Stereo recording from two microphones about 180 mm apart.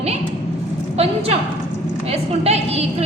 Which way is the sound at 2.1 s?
35° right (ahead or behind).